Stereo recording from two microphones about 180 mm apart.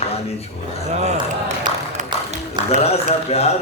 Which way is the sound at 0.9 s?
40° right (ahead or behind).